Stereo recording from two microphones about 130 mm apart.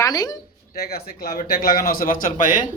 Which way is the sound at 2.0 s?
90° left.